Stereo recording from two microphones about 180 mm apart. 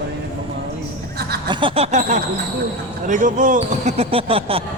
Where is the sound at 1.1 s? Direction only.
60° right (ahead or behind).